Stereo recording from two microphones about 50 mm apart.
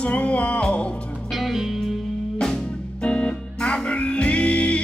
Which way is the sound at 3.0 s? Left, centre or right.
Left.